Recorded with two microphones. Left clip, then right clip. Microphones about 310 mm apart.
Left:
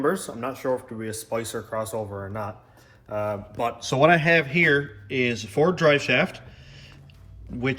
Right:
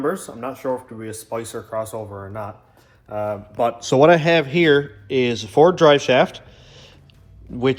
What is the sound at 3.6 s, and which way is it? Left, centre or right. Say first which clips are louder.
A man's voice: right 6 dB; right.